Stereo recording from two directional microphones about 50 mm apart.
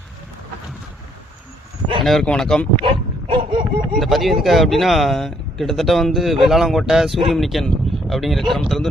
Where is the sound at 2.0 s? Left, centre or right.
Centre.